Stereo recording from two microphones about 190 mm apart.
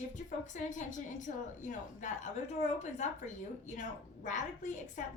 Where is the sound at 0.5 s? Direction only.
40° left (ahead or behind).